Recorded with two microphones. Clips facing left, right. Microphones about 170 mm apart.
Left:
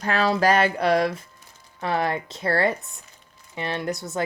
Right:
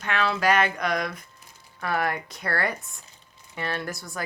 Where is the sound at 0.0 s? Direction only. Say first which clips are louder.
Left 4 dB; 35° left (ahead or behind).